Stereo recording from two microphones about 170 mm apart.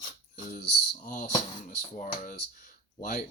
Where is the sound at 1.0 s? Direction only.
50° left (ahead or behind).